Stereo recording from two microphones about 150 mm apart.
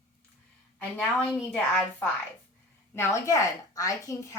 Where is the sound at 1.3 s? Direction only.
Centre (ahead or behind).